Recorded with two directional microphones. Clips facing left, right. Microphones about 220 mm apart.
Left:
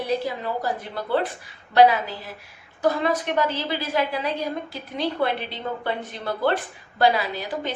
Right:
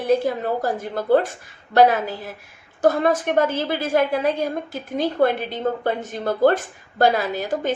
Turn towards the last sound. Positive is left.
turn(degrees=-45)  # may be behind; listen again after turning